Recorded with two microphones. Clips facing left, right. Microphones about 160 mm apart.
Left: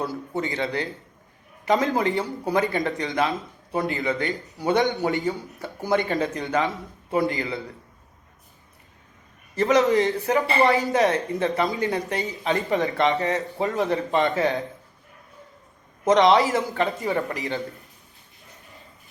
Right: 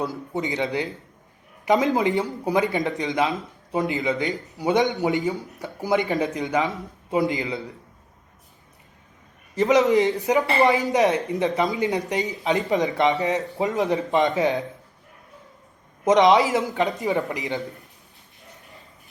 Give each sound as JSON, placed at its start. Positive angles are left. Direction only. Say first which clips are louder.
{"t": 0.0, "sound": "speech", "louder": "right 1 dB", "side_deg": -15}
{"t": 9.6, "sound": "speech", "louder": "right 1 dB", "side_deg": -20}
{"t": 16.0, "sound": "speech", "louder": "right 1 dB", "side_deg": -15}